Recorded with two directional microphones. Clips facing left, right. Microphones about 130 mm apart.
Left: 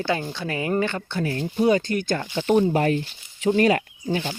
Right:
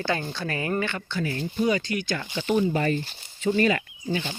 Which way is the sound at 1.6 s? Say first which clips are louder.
Left 6 dB; 50° left (ahead or behind).